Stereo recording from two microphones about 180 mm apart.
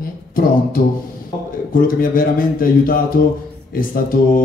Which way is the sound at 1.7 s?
50° left (ahead or behind).